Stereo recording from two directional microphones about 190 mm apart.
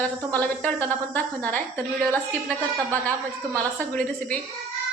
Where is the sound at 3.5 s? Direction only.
5° left (ahead or behind).